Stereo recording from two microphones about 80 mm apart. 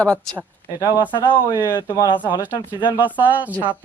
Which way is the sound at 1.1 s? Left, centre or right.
Left.